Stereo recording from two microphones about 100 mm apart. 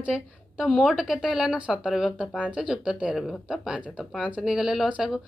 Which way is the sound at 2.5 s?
10° right (ahead or behind).